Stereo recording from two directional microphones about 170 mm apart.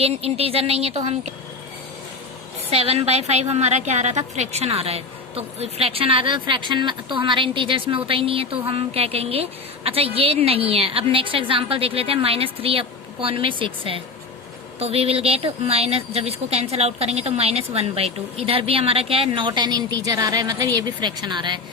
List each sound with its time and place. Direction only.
0.0 s a woman's voice: 35° right (ahead or behind)
2.6 s a woman's voice: 35° right (ahead or behind)